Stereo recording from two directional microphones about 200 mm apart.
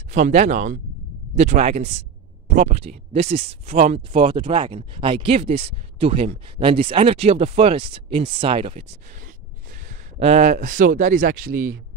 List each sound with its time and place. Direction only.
0.1 s speech: 35° right (ahead or behind)
3.7 s speech: 40° right (ahead or behind)
4.1 s speech: 25° right (ahead or behind); by 11.7 s 45° right (ahead or behind)